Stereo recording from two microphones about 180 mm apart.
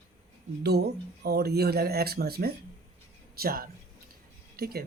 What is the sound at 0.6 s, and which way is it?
A woman's voice, 65° right (ahead or behind).